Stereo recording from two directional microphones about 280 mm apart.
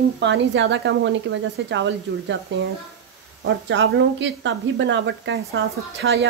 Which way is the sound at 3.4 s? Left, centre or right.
Right.